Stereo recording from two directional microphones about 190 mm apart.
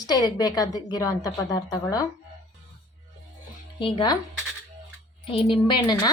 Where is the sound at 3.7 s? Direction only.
25° left (ahead or behind).